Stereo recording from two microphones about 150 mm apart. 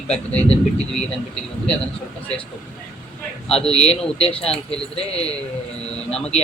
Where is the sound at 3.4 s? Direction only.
40° left (ahead or behind).